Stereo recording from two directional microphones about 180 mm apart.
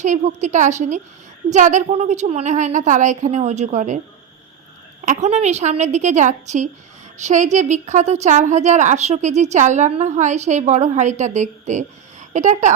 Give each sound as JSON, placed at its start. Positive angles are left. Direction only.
{"t": 0.0, "sound": "a woman's voice", "side_deg": -40}
{"t": 5.0, "sound": "a woman's voice", "side_deg": -40}